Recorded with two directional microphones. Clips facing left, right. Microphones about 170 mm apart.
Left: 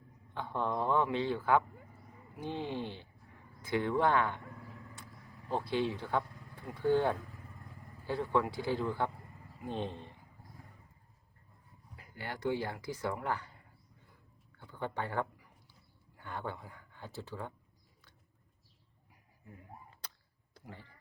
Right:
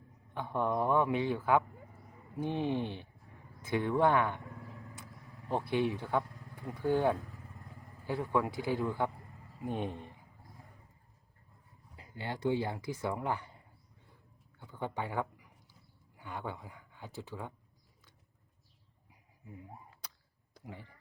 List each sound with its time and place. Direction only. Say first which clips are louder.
0.3 s a man's voice: right 2 dB; 15° right (ahead or behind)
5.5 s a man's voice: right 2 dB; 20° right (ahead or behind)
11.9 s speech: right 3 dB; 25° right (ahead or behind)
14.6 s speech: even; 15° right (ahead or behind)
20.5 s a sound: right 3 dB; 15° right (ahead or behind)